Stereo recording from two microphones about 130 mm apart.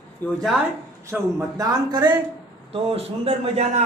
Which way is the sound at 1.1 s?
25° right (ahead or behind).